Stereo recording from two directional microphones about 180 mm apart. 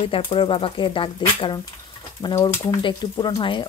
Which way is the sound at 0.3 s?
30° left (ahead or behind).